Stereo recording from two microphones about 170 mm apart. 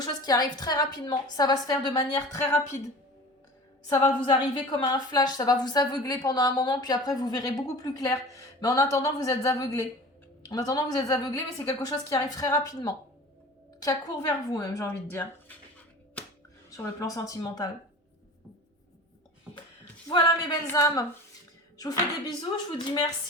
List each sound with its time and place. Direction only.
0.0 s a woman's voice: 25° left (ahead or behind)
3.8 s a woman's voice: 20° left (ahead or behind)
16.6 s a woman's voice: 20° left (ahead or behind)
20.1 s a woman's voice: 25° left (ahead or behind)